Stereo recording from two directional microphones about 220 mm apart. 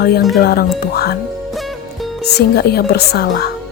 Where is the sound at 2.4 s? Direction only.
45° left (ahead or behind).